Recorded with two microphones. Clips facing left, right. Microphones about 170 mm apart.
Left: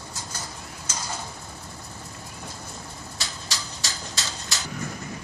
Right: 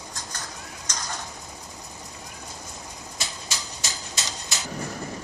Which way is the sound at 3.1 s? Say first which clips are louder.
Right 1 dB; 20° right (ahead or behind).